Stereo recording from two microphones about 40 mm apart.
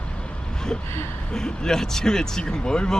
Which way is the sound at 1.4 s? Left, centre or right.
Centre.